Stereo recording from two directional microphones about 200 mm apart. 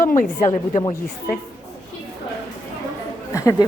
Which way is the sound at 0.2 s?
40° left (ahead or behind).